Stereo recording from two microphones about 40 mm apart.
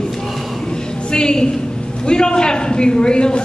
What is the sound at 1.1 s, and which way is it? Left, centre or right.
A man's voice, left.